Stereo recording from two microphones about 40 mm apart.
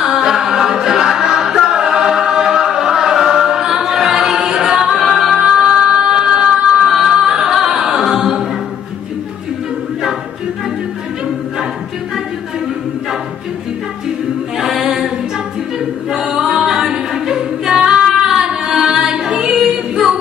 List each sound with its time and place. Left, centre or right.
0.0 s a capella: centre
5.0 s music: centre
14.6 s a capella: centre